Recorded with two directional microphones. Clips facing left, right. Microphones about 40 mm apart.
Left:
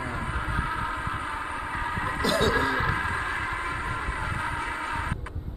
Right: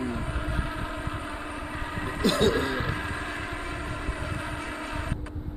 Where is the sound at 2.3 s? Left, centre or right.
Left.